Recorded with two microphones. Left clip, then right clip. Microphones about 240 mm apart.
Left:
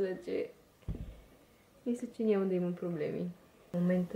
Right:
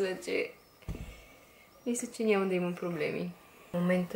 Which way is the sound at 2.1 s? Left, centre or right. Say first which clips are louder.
Right 3 dB; centre.